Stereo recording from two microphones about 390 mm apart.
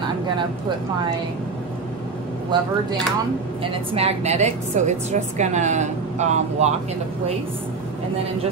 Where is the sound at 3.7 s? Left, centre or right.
Centre.